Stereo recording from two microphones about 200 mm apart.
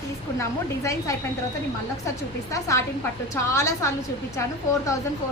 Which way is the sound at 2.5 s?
15° left (ahead or behind).